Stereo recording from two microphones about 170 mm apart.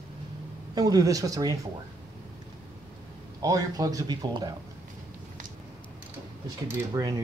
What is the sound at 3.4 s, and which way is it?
Speech, 20° right (ahead or behind).